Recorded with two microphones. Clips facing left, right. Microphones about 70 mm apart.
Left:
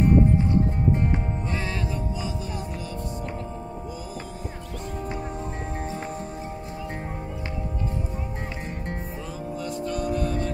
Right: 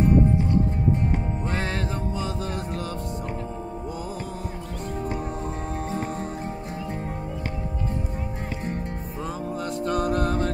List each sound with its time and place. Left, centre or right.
9.6 s music: right